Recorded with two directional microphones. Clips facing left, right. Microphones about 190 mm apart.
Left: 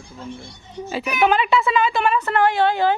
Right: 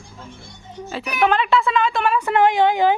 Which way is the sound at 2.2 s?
15° right (ahead or behind).